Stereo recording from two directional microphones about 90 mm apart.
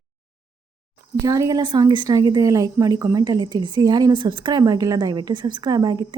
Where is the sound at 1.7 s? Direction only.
55° right (ahead or behind).